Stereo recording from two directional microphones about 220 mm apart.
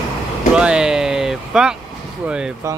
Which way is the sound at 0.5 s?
5° right (ahead or behind).